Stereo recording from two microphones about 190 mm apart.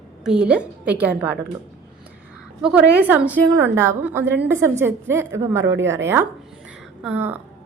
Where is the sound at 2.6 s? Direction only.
5° right (ahead or behind).